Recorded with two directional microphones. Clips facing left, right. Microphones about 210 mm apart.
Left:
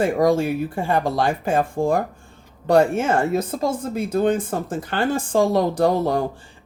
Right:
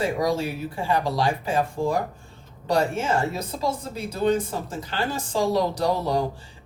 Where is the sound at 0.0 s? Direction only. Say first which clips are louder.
Left 6 dB; 50° left (ahead or behind).